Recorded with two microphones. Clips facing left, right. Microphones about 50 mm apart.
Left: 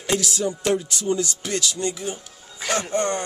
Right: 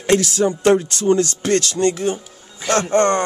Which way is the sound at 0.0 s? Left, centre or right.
Right.